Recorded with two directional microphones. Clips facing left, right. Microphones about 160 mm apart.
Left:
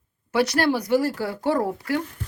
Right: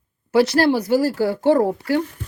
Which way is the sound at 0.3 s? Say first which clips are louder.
Right 5 dB; 30° right (ahead or behind).